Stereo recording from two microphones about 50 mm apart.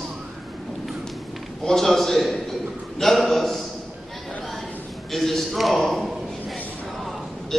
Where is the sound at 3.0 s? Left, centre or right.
Centre.